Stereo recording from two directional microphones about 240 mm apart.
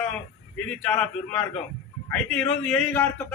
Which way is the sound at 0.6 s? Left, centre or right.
Centre.